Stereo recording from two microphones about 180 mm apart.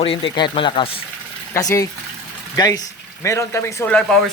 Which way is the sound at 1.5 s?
20° left (ahead or behind).